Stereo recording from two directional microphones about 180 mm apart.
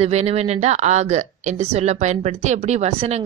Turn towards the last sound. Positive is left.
turn(degrees=-40)  # may be behind; listen again after turning